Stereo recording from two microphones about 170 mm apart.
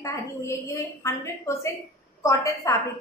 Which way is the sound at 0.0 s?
15° left (ahead or behind).